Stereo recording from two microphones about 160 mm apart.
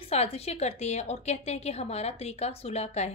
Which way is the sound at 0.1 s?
40° left (ahead or behind).